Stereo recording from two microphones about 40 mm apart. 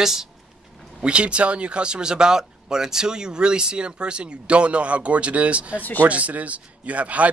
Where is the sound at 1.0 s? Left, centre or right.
Right.